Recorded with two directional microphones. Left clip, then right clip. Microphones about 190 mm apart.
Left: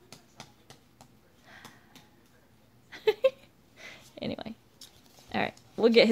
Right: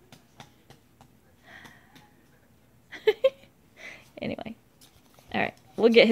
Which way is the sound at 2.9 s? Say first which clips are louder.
Right 2 dB; 10° right (ahead or behind).